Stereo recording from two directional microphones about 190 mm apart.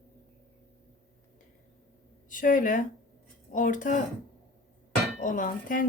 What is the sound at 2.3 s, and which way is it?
Speech, 45° left (ahead or behind).